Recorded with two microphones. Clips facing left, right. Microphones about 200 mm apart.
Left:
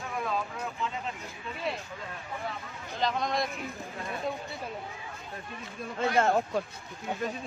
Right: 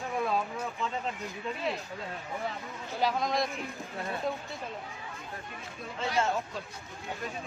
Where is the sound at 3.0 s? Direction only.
5° right (ahead or behind).